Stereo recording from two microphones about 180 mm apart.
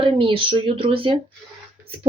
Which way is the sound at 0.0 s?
30° right (ahead or behind).